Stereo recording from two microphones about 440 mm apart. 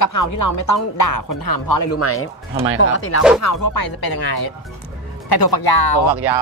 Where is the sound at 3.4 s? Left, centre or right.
Left.